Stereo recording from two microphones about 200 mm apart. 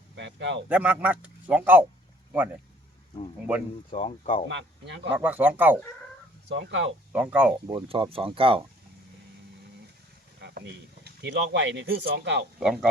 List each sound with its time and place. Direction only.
0.2 s a sound: 60° right (ahead or behind)
0.7 s speech: 5° right (ahead or behind)
3.9 s speech: 35° left (ahead or behind)
4.4 s speech: 60° right (ahead or behind)
5.1 s speech: 10° right (ahead or behind)
6.5 s speech: 60° right (ahead or behind)
7.1 s speech: 10° right (ahead or behind)
7.7 s speech: 25° right (ahead or behind)
10.4 s a sound: 60° right (ahead or behind)
11.0 s speech: 60° right (ahead or behind)
12.5 s speech: 5° right (ahead or behind)